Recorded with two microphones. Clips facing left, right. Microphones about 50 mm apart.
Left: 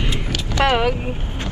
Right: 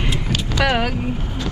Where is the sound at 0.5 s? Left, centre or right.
Left.